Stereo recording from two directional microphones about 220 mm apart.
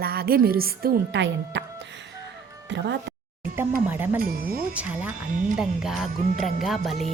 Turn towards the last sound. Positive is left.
turn(degrees=0)  # may be behind; listen again after turning